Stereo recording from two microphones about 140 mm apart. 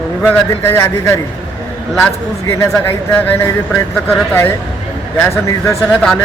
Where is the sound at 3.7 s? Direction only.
5° left (ahead or behind).